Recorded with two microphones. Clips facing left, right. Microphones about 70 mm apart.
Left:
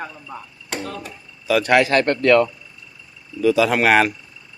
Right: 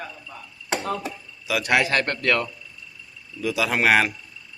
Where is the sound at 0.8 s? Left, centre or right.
Centre.